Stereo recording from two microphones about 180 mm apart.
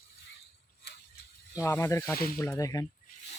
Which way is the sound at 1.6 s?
15° left (ahead or behind).